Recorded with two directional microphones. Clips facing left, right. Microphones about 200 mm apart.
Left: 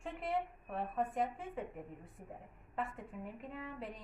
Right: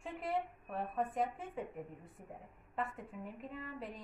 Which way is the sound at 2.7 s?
Centre (ahead or behind).